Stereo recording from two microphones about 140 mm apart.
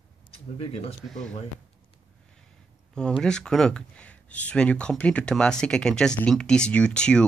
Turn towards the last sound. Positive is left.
turn(degrees=5)  # may be behind; listen again after turning